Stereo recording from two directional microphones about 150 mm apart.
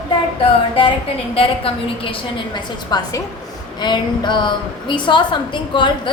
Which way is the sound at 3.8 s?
30° left (ahead or behind).